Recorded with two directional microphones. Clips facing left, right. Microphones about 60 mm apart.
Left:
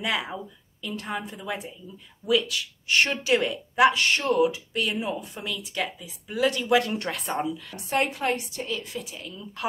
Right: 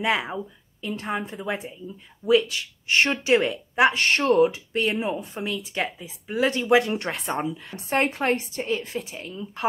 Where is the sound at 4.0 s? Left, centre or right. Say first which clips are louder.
Right 3 dB; right.